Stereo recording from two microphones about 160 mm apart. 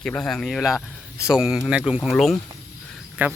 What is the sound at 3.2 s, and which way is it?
Speech, 10° right (ahead or behind).